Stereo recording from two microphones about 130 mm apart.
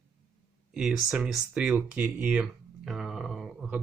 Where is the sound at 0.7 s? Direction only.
5° right (ahead or behind).